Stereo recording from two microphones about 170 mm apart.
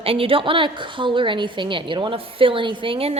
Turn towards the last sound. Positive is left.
turn(degrees=-35)  # may be behind; listen again after turning